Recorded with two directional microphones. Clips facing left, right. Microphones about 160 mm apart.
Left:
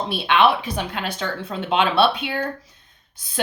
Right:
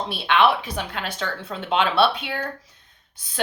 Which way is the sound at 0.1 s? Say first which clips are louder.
Left 1 dB; 15° left (ahead or behind).